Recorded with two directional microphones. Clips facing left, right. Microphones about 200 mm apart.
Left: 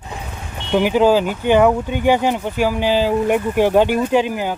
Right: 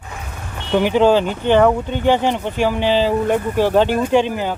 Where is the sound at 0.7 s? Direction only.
5° left (ahead or behind).